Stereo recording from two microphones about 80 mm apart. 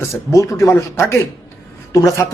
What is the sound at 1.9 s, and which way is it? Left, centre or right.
Speech, left.